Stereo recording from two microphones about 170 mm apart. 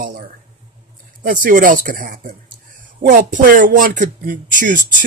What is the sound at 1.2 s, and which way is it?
Speech, 50° right (ahead or behind).